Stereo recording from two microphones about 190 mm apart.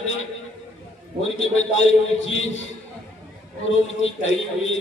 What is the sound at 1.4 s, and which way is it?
A man's voice, 85° left.